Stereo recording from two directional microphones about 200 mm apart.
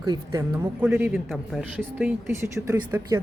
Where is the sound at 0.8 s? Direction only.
5° right (ahead or behind).